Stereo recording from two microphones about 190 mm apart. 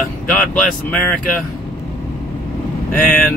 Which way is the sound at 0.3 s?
5° left (ahead or behind).